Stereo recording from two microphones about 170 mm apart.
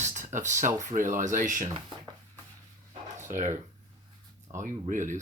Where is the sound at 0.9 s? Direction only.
50° right (ahead or behind).